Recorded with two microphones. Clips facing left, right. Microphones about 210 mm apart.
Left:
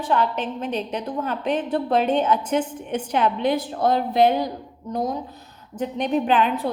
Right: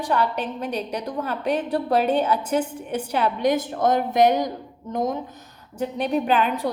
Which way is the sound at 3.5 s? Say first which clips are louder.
Even; 50° right (ahead or behind).